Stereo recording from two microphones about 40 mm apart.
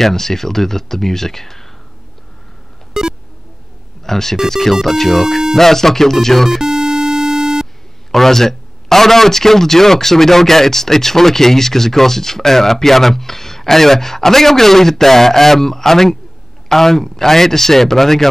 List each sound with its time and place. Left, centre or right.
0.0 s speech: centre
2.9 s a sound: centre
4.0 s speech: centre
5.6 s speech: centre
6.6 s music: centre
8.1 s speech: centre